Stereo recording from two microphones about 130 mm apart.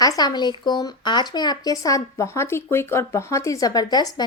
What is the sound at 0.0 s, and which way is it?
Speech, 30° left (ahead or behind).